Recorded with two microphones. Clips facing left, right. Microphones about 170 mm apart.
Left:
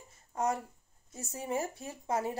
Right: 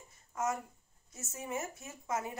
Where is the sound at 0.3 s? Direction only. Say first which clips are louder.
Left 3 dB; 35° left (ahead or behind).